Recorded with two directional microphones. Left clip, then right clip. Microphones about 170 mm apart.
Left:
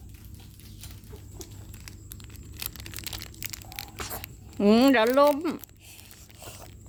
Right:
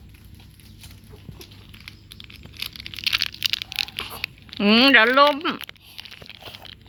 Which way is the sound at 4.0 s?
20° left (ahead or behind).